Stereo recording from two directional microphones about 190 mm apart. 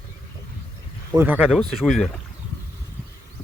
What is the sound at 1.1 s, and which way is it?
Speech, 10° right (ahead or behind).